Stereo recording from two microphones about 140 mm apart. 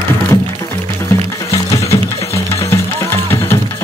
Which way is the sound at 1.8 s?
20° left (ahead or behind).